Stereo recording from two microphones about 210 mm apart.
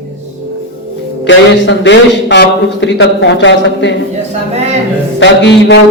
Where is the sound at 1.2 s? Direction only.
60° left (ahead or behind).